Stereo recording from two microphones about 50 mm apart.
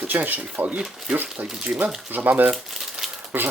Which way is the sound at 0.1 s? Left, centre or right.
Right.